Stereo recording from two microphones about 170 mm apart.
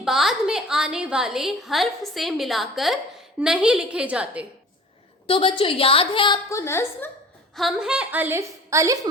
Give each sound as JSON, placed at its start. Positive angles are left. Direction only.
{"t": 0.0, "sound": "a woman's voice", "side_deg": 0}
{"t": 5.2, "sound": "a woman's voice", "side_deg": 30}
{"t": 7.5, "sound": "a woman's voice", "side_deg": 0}